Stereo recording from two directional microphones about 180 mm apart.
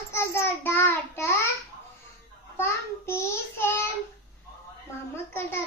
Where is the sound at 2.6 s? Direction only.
15° left (ahead or behind).